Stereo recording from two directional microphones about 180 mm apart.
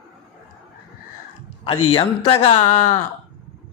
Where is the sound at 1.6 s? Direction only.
25° left (ahead or behind).